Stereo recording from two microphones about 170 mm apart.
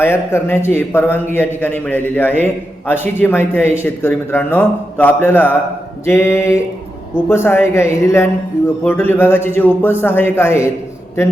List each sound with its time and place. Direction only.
0.0 s a man's voice: 15° left (ahead or behind)